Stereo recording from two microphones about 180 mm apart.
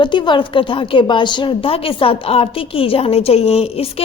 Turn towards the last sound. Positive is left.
turn(degrees=35)  # may be behind; listen again after turning